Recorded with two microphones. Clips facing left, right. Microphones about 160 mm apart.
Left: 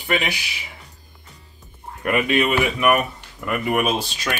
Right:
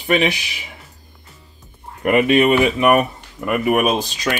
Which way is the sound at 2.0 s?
25° right (ahead or behind).